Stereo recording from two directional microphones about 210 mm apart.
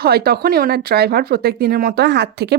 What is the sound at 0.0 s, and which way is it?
Speech, 50° right (ahead or behind).